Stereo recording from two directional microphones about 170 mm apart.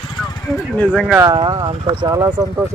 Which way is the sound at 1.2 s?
25° right (ahead or behind).